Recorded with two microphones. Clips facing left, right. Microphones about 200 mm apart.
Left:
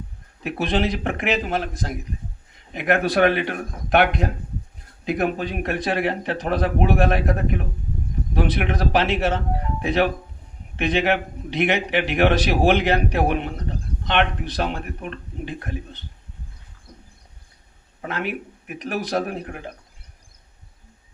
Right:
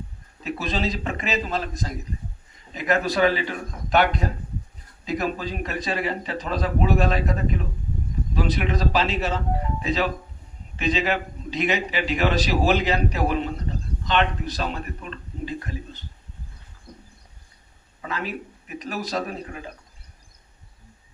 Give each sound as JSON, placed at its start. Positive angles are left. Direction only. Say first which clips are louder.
{"t": 0.4, "sound": "a man's voice", "louder": "left 4 dB", "side_deg": 65}
{"t": 18.0, "sound": "a man's voice", "louder": "left 3 dB", "side_deg": 65}